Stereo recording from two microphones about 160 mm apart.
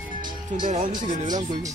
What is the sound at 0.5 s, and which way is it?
Speech, 50° right (ahead or behind).